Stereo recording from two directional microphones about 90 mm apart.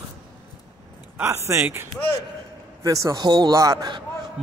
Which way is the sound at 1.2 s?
30° right (ahead or behind).